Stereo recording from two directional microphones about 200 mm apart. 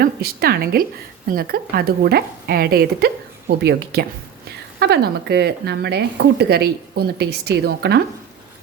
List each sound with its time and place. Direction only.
0.0 s a woman's voice: 50° right (ahead or behind)